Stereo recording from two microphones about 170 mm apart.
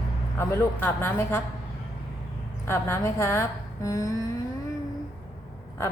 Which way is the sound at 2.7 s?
15° left (ahead or behind).